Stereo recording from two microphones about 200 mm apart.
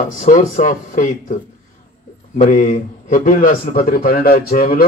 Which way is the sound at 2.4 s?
45° left (ahead or behind).